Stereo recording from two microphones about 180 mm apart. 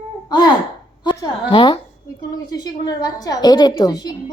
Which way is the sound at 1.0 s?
20° left (ahead or behind).